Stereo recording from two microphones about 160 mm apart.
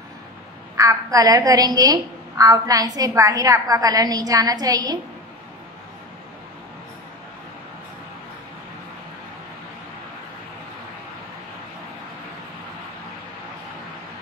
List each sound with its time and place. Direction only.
0.7 s a woman's voice: 20° right (ahead or behind)